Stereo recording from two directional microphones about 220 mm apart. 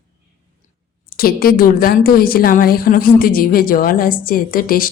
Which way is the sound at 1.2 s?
45° left (ahead or behind).